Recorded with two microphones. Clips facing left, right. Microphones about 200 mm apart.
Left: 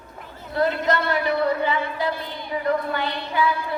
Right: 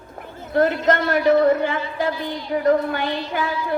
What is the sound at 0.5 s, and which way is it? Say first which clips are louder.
Speech: right 4 dB; 50° right (ahead or behind).